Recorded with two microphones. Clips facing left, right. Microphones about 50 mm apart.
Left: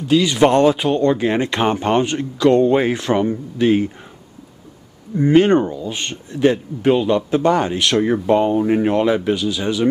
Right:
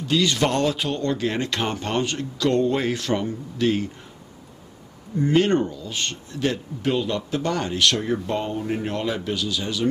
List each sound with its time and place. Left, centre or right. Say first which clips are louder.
0.1 s speech: left 7 dB; centre
5.2 s speech: left 6 dB; left